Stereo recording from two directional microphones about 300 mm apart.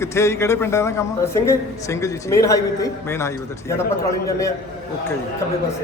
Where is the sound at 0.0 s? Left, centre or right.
Centre.